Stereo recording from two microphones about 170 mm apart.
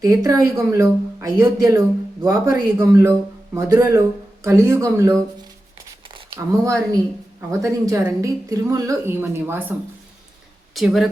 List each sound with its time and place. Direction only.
0.0 s speech: 20° right (ahead or behind)
6.3 s a woman's voice: 20° right (ahead or behind)
10.8 s speech: 5° right (ahead or behind)